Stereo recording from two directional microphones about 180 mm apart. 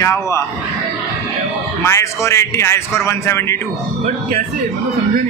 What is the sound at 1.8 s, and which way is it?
A man's voice, 15° left (ahead or behind).